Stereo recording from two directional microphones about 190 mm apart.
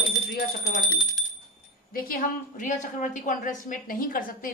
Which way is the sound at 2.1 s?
45° left (ahead or behind).